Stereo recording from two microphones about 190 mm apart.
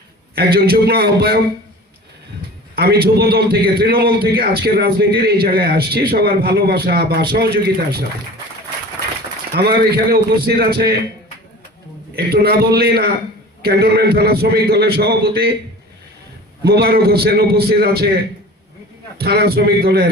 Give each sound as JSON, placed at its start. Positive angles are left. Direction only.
{"t": 0.3, "sound": "a man's voice", "side_deg": -55}
{"t": 2.7, "sound": "a man's voice", "side_deg": -55}
{"t": 9.6, "sound": "a man's voice", "side_deg": -55}
{"t": 12.1, "sound": "a man's voice", "side_deg": -55}
{"t": 16.6, "sound": "a man's voice", "side_deg": -55}